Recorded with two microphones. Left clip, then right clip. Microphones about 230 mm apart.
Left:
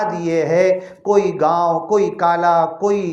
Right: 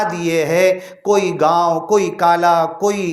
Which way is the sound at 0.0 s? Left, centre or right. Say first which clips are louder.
Right 1 dB; right.